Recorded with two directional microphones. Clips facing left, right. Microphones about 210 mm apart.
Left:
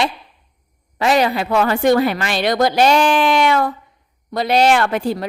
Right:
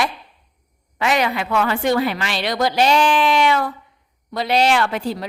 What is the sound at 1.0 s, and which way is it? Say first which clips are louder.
A woman's voice: left 4 dB; 35° left (ahead or behind).